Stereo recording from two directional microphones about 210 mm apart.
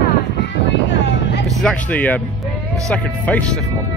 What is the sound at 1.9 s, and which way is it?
Music, 5° left (ahead or behind).